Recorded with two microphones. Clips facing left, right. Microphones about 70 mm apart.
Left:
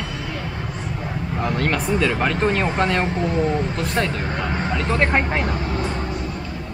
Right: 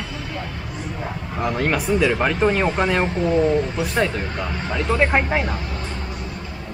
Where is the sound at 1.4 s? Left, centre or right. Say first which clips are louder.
Right 1 dB; centre.